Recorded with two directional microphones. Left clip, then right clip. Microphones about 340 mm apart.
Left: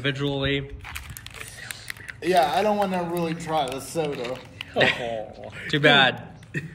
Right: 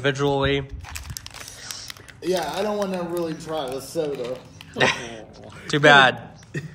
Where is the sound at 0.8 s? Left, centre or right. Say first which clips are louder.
Right 1 dB; right.